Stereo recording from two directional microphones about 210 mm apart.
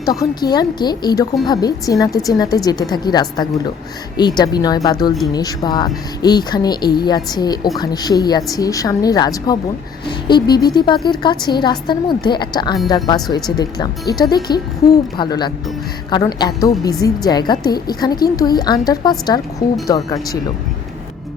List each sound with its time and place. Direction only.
0.0 s a woman's voice: 15° left (ahead or behind)